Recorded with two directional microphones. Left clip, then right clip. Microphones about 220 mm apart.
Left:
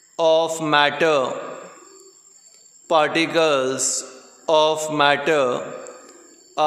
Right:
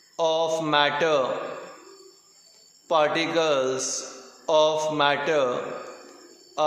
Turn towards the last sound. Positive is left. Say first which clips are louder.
# left 4 dB
turn(degrees=45)  # may be behind; listen again after turning